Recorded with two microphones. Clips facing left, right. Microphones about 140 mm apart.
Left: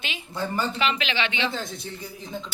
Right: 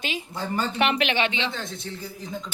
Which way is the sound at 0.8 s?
60° right (ahead or behind).